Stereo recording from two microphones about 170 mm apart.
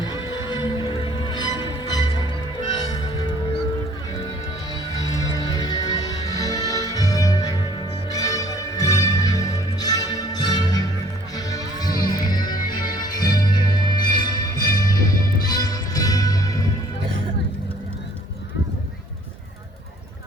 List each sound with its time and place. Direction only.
0.0 s music: 25° left (ahead or behind)
5.5 s music: 20° left (ahead or behind)